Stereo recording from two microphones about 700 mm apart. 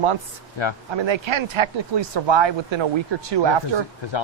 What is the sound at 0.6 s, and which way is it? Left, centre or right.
Speech, left.